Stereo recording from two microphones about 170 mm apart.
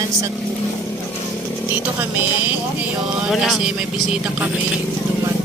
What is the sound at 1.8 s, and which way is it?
Speech, 10° right (ahead or behind).